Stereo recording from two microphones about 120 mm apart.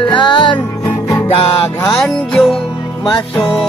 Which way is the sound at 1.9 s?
Centre (ahead or behind).